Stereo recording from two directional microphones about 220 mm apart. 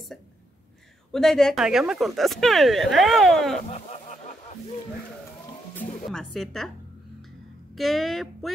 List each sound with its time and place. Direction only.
1.1 s speech: centre (ahead or behind)
3.7 s a sound: 30° left (ahead or behind)
5.8 s music: 10° left (ahead or behind)
6.3 s speech: centre (ahead or behind)
7.2 s music: centre (ahead or behind)